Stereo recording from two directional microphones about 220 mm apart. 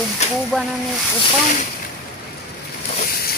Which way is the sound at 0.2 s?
30° left (ahead or behind).